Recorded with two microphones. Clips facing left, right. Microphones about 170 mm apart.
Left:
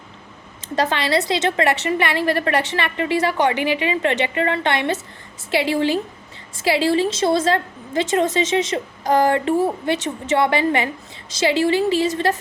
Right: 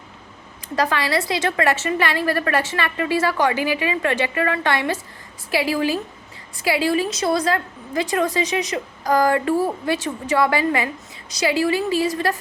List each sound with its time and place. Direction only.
0.8 s a woman's voice: 25° left (ahead or behind)